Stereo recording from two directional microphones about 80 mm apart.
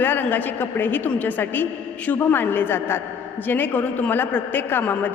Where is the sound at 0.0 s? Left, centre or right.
Left.